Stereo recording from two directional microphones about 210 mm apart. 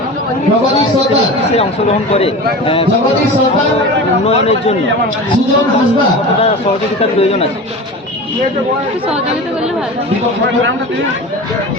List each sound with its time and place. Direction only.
2.1 s speech: 25° left (ahead or behind)
4.3 s speech: 30° left (ahead or behind)
7.2 s speech: 30° left (ahead or behind)